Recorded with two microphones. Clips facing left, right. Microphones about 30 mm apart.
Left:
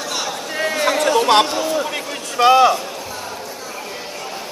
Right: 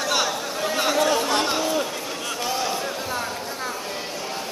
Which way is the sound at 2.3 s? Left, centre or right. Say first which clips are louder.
Left 16 dB; left.